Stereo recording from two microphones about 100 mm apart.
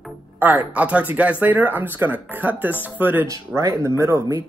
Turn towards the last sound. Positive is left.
turn(degrees=-30)  # may be behind; listen again after turning